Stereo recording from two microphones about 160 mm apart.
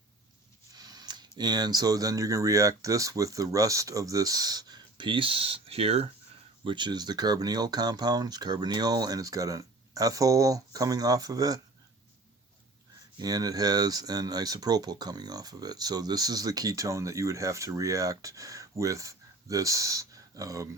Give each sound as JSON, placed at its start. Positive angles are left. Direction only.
{"t": 0.8, "sound": "speech", "side_deg": -25}
{"t": 6.7, "sound": "speech", "side_deg": -30}
{"t": 13.1, "sound": "speech", "side_deg": -25}